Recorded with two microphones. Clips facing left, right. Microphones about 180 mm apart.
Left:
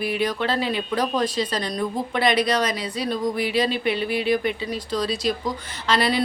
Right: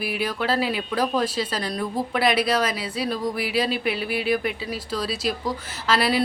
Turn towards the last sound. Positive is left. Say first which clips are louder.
# even
turn(degrees=-5)  # may be behind; listen again after turning